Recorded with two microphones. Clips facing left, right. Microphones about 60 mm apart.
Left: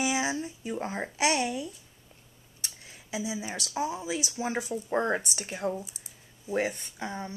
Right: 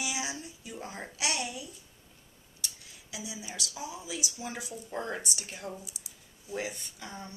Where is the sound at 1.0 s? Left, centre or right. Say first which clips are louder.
Left 7 dB; left.